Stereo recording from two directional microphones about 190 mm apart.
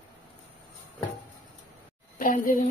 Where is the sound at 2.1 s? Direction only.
45° left (ahead or behind).